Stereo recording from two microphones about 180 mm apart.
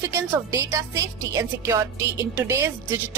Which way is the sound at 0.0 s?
15° right (ahead or behind).